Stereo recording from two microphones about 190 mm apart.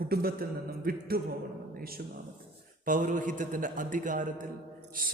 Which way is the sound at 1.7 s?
50° right (ahead or behind).